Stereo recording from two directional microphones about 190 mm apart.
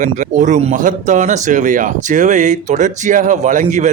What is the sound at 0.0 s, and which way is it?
Speech, 40° right (ahead or behind).